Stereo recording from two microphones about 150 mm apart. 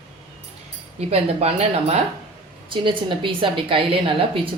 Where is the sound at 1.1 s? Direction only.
45° right (ahead or behind).